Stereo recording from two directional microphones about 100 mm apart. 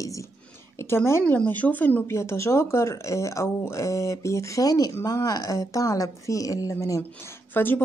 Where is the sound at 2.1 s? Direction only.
30° left (ahead or behind).